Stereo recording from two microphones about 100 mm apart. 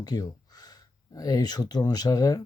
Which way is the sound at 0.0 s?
40° left (ahead or behind).